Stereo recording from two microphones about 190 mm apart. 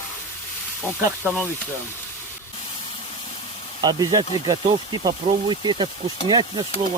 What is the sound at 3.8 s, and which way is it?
Speech, 20° right (ahead or behind).